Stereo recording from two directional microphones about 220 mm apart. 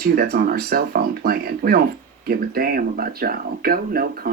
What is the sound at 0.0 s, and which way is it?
Speech, 45° right (ahead or behind).